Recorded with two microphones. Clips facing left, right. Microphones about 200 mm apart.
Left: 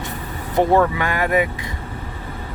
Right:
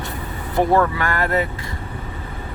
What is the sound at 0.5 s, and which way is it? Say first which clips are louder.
Speech: left 1 dB; 20° left (ahead or behind).